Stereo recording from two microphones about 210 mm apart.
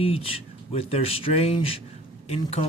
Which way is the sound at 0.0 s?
25° left (ahead or behind).